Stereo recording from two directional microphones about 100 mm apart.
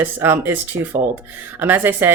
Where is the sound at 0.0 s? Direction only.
20° right (ahead or behind).